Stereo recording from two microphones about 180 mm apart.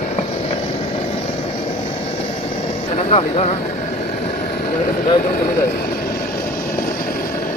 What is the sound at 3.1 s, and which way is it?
Speech, 35° left (ahead or behind).